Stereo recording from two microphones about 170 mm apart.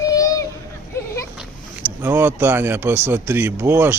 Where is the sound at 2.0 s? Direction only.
10° right (ahead or behind).